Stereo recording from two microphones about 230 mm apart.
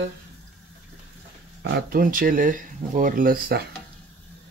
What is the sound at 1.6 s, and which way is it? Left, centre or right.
Speech, right.